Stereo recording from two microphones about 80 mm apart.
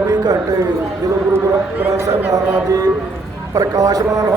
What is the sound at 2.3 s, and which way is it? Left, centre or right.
A man's voice, right.